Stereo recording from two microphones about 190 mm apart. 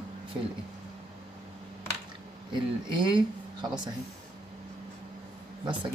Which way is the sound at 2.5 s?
25° right (ahead or behind).